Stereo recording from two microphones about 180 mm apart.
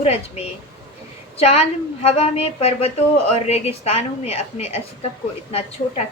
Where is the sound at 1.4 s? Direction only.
35° left (ahead or behind).